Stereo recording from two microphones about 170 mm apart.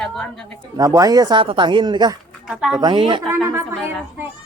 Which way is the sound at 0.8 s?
20° right (ahead or behind).